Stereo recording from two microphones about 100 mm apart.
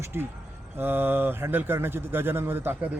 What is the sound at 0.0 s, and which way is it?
A man's voice, 25° right (ahead or behind).